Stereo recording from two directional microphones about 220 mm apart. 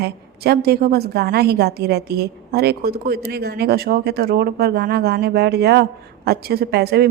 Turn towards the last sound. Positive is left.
turn(degrees=-45)  # may be behind; listen again after turning